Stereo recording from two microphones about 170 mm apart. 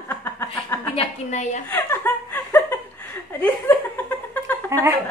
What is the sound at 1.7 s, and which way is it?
Chuckle, 10° left (ahead or behind).